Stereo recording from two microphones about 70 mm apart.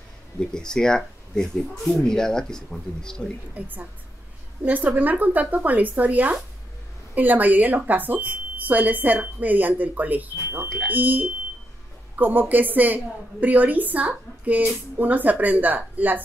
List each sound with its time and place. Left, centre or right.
0.4 s speech: centre
3.5 s speech: right